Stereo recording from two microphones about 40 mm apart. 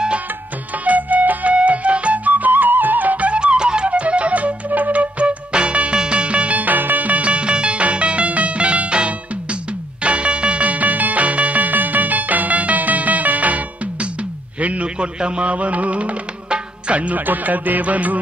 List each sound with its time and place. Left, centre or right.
0.8 s music: right
2.3 s music: right
3.3 s music: right
5.5 s music: right
14.6 s a sound: right
15.0 s music: right
17.3 s music: right